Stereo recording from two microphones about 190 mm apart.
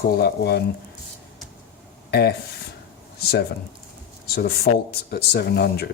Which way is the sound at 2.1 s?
60° left (ahead or behind).